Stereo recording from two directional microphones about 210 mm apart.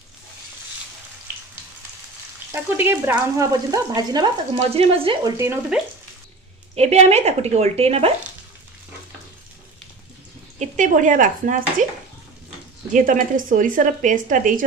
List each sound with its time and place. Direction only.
2.5 s speech: 10° right (ahead or behind); by 5.3 s 25° right (ahead or behind)
5.4 s speech: 10° right (ahead or behind)
6.7 s a woman's voice: 30° right (ahead or behind)
10.6 s a woman's voice: 35° right (ahead or behind)
12.9 s a woman's voice: 40° right (ahead or behind)